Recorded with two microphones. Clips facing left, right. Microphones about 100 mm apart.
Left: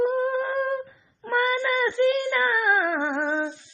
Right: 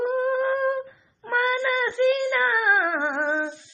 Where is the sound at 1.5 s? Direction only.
Centre (ahead or behind).